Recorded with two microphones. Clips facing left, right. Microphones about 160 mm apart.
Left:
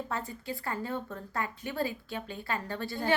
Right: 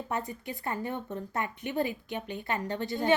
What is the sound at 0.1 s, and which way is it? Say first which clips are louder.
A woman's voice: right 2 dB; 20° right (ahead or behind).